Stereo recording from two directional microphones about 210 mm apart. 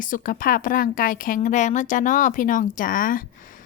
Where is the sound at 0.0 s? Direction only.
40° left (ahead or behind).